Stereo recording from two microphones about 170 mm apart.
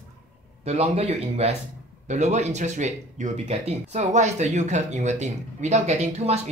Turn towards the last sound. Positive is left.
turn(degrees=-40)  # may be behind; listen again after turning